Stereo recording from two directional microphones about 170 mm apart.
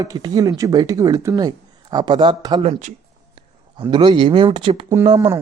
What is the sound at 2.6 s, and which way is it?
Speech, 40° right (ahead or behind).